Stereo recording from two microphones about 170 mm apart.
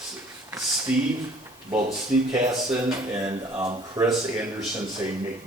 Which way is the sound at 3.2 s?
20° right (ahead or behind).